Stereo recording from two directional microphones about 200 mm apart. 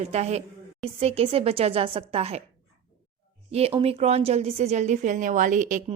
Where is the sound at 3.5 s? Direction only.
30° right (ahead or behind).